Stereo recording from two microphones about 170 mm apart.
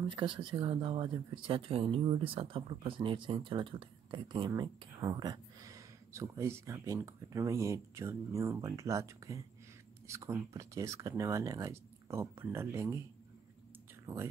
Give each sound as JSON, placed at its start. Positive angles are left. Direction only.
{"t": 0.1, "sound": "speech", "side_deg": -30}
{"t": 14.1, "sound": "speech", "side_deg": -10}